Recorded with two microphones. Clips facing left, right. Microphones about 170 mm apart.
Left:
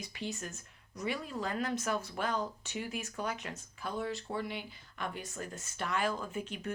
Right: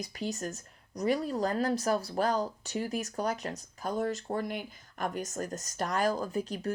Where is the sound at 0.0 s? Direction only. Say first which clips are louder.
Right 5 dB; 40° right (ahead or behind).